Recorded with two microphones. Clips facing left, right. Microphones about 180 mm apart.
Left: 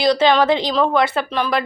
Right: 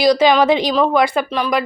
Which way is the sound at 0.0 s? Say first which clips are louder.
Right 2 dB; 10° right (ahead or behind).